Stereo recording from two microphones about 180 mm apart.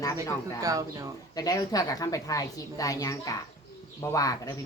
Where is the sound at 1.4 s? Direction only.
20° left (ahead or behind).